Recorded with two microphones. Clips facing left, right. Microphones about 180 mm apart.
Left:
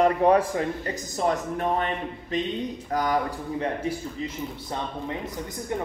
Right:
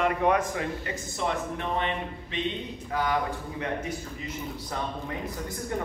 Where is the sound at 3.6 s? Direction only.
30° left (ahead or behind).